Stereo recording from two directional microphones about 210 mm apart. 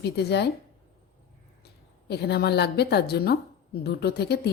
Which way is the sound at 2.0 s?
50° left (ahead or behind).